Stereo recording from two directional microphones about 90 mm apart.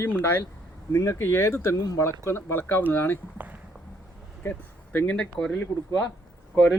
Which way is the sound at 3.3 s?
20° right (ahead or behind).